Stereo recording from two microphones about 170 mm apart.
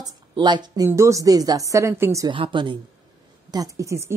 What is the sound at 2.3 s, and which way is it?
Speech, 30° right (ahead or behind).